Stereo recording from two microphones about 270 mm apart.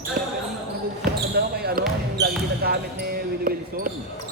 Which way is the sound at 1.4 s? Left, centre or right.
Right.